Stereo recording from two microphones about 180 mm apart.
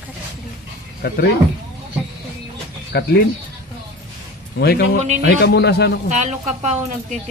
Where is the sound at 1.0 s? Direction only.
60° left (ahead or behind).